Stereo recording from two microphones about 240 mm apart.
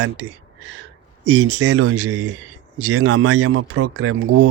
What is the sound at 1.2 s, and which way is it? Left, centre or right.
Speech, right.